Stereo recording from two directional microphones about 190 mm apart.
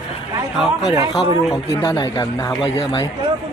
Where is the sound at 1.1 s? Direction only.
25° left (ahead or behind).